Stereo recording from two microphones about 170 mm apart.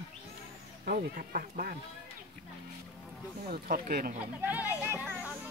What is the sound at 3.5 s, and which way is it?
Speech, 55° right (ahead or behind).